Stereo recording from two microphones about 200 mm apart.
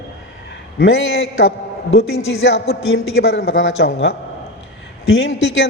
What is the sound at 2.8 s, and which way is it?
A man's voice, 80° left.